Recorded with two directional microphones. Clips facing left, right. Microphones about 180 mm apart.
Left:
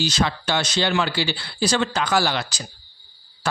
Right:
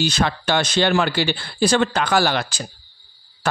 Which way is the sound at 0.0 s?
55° right (ahead or behind).